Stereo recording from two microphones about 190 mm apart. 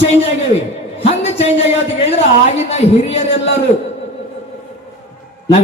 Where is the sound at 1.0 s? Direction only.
35° left (ahead or behind).